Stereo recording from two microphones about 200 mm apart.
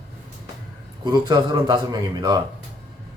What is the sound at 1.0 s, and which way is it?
Speech, 20° right (ahead or behind).